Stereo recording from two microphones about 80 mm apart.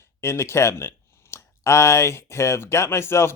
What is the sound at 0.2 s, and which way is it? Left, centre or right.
Speech, left.